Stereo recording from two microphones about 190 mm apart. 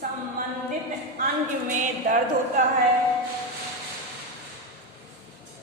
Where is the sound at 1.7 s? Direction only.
45° right (ahead or behind).